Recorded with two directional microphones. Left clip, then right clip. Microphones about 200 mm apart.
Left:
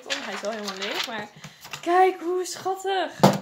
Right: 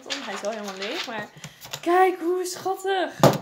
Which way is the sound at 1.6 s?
10° right (ahead or behind).